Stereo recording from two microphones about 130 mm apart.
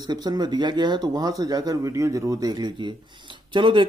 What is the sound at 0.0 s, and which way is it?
Speech, 30° right (ahead or behind).